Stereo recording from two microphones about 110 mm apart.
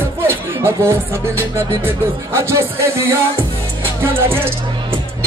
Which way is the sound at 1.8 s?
20° right (ahead or behind).